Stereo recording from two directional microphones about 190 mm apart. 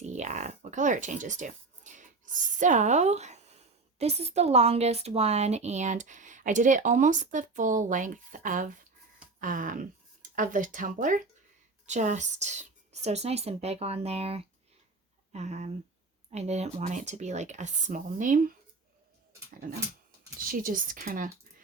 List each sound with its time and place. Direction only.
0.0 s speech: 35° right (ahead or behind)
20.5 s speech: 45° right (ahead or behind)